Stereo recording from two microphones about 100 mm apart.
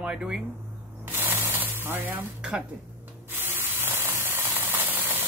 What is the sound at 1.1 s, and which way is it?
Spray, 20° right (ahead or behind).